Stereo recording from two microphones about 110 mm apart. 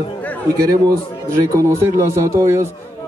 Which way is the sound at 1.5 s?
25° right (ahead or behind).